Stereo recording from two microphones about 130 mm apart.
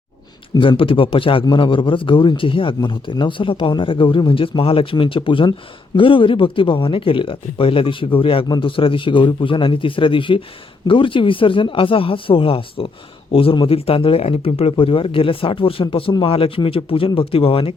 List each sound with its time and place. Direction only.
0.5 s a man's voice: 40° left (ahead or behind)